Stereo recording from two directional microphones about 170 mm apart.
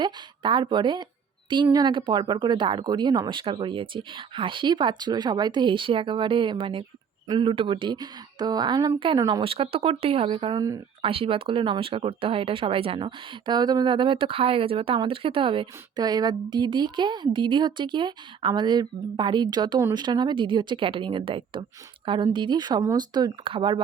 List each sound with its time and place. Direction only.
0.0 s speech: 25° right (ahead or behind)